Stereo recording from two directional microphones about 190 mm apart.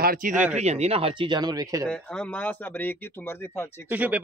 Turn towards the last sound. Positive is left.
turn(degrees=-10)  # may be behind; listen again after turning